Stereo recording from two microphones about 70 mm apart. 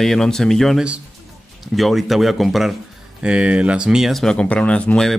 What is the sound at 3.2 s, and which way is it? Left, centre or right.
Speech, centre.